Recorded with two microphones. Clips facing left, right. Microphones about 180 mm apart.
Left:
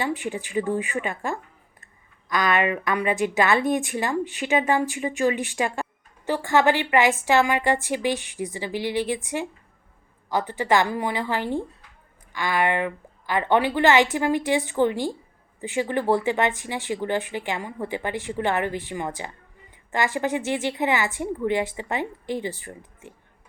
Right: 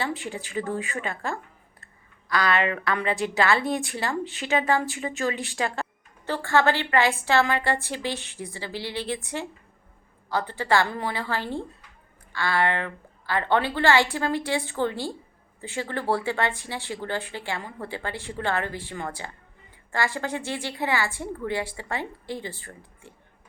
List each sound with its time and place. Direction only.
0.0 s a woman's voice: 15° left (ahead or behind)